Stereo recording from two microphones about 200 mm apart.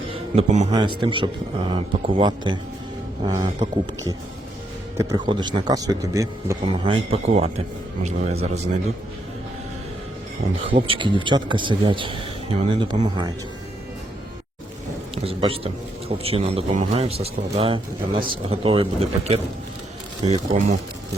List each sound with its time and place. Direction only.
0.1 s a sound: 30° right (ahead or behind)
0.7 s a man's voice: 20° right (ahead or behind)
6.8 s a man's voice: 30° right (ahead or behind)
10.7 s a man's voice: 25° right (ahead or behind)
15.1 s a man's voice: 30° right (ahead or behind)